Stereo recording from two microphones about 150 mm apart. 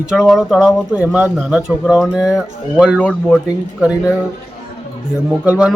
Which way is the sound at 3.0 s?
5° left (ahead or behind).